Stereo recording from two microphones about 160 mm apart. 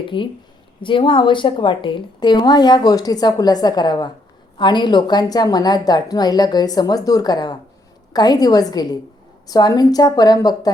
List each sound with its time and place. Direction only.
0.1 s a woman's voice: 30° left (ahead or behind)